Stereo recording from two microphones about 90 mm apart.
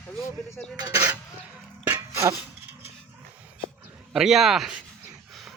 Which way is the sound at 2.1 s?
35° right (ahead or behind).